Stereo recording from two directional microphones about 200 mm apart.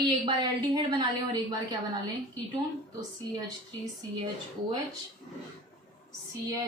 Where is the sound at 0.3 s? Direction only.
20° right (ahead or behind).